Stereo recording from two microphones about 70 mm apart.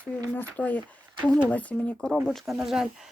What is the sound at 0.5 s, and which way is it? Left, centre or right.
Speech, left.